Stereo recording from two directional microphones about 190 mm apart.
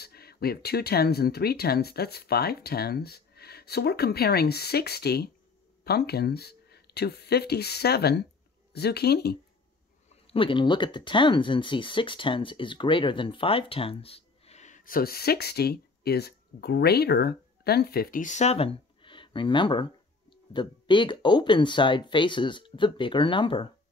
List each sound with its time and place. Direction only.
0.0 s speech: 55° left (ahead or behind)
10.2 s speech: 30° left (ahead or behind)